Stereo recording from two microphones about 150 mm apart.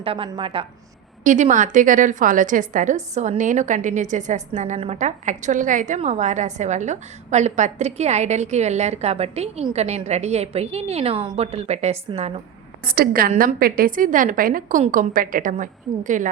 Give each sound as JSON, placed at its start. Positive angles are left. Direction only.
{"t": 0.0, "sound": "a woman's voice", "side_deg": -40}
{"t": 1.2, "sound": "a woman's voice", "side_deg": -55}
{"t": 12.8, "sound": "a woman's voice", "side_deg": -75}